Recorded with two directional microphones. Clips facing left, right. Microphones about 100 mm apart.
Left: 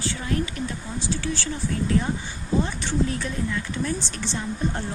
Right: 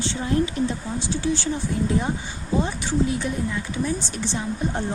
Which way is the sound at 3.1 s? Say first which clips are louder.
Right 2 dB; 15° right (ahead or behind).